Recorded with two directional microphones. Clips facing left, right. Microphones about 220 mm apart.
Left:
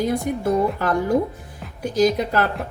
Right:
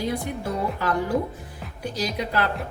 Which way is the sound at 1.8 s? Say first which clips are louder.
Left 9 dB; 45° left (ahead or behind).